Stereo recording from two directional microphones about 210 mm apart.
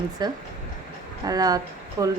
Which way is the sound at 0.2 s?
20° right (ahead or behind).